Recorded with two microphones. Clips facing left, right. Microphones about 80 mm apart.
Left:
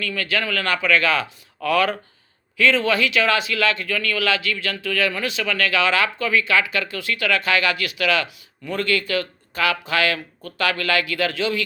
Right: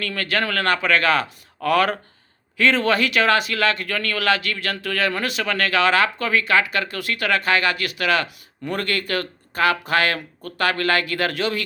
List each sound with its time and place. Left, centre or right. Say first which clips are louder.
0.0 s speech: right 1 dB; right
8.7 s speech: left 2 dB; right